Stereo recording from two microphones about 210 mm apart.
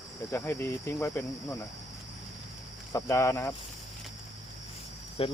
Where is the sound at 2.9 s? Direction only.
15° left (ahead or behind).